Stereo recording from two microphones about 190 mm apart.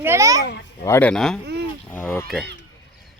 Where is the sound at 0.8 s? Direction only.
10° left (ahead or behind).